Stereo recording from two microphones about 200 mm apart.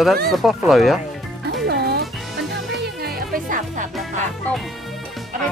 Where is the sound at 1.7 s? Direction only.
55° right (ahead or behind).